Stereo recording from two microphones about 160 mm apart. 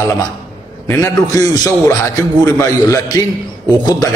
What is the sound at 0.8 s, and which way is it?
A man's voice, 15° left (ahead or behind).